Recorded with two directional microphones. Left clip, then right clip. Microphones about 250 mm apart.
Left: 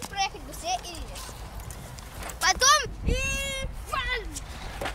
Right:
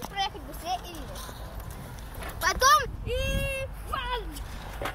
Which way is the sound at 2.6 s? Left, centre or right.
Left.